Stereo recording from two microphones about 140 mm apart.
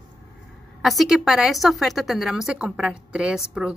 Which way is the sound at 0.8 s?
Centre (ahead or behind).